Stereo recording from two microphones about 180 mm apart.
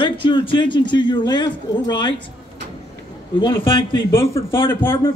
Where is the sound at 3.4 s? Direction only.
25° left (ahead or behind).